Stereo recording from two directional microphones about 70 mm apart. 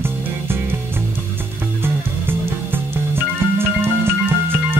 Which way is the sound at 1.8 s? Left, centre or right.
Right.